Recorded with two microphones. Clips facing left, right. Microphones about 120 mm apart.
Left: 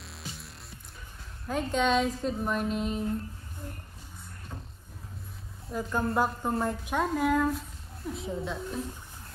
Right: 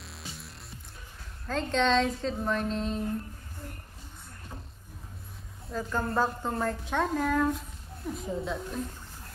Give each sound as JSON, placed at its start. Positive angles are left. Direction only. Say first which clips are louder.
{"t": 0.0, "sound": "music", "louder": "left 1 dB", "side_deg": 0}
{"t": 1.5, "sound": "a woman's voice", "louder": "even", "side_deg": 10}
{"t": 5.7, "sound": "a woman's voice", "louder": "left 1 dB", "side_deg": 10}